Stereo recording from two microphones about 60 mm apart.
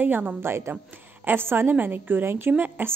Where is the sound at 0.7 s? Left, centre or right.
Right.